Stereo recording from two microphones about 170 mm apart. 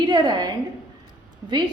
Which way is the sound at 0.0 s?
25° right (ahead or behind).